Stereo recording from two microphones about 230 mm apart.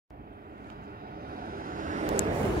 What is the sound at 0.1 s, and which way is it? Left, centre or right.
Vehicle, right.